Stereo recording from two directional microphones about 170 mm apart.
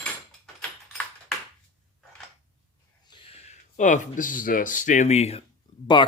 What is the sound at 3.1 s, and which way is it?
Speech, 35° left (ahead or behind).